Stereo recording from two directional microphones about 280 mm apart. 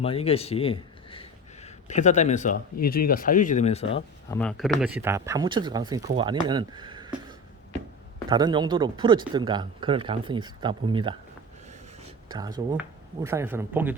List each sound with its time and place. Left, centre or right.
0.0 s speech: left
4.4 s speech: centre
8.3 s speech: centre
12.3 s speech: centre